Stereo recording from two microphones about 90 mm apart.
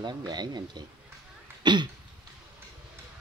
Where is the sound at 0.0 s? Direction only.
55° right (ahead or behind).